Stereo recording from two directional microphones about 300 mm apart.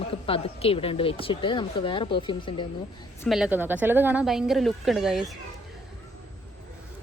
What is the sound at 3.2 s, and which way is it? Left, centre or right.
Speech, centre.